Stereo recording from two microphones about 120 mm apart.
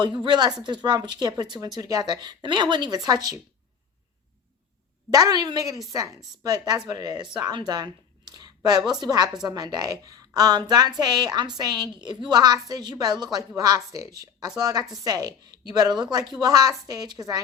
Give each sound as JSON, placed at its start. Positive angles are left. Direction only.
{"t": 0.0, "sound": "a woman's voice", "side_deg": -40}
{"t": 5.1, "sound": "a woman's voice", "side_deg": -30}
{"t": 7.7, "sound": "a sound", "side_deg": -35}
{"t": 8.9, "sound": "a woman's voice", "side_deg": -35}